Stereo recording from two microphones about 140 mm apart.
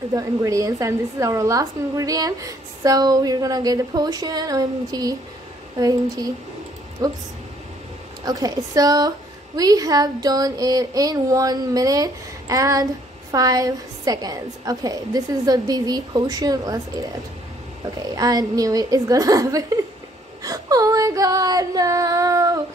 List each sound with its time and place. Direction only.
0.1 s a woman's voice: 25° right (ahead or behind)
8.3 s a woman's voice: 25° right (ahead or behind)